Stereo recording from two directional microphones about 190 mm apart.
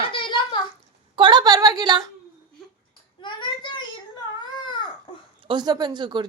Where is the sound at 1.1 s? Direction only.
25° right (ahead or behind).